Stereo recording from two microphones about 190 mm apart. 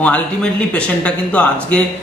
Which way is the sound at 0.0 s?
5° left (ahead or behind).